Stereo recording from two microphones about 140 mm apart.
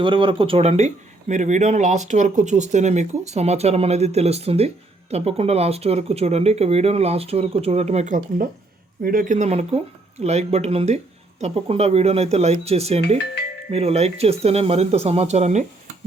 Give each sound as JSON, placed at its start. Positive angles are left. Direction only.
{"t": 0.0, "sound": "speech", "side_deg": -35}
{"t": 9.0, "sound": "speech", "side_deg": -85}